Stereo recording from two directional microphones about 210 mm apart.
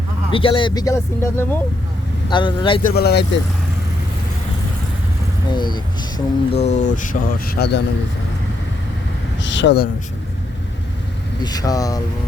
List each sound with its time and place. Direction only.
0.3 s speech: 25° left (ahead or behind)
2.8 s speech: 50° left (ahead or behind)
5.5 s speech: 20° left (ahead or behind); by 7.9 s 50° left (ahead or behind)
9.4 s a sound: 60° left (ahead or behind)
11.4 s speech: 15° left (ahead or behind)